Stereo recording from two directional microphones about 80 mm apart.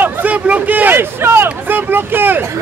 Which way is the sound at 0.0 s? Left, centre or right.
Right.